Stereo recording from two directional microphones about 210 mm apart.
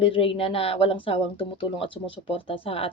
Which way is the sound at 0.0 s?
25° left (ahead or behind).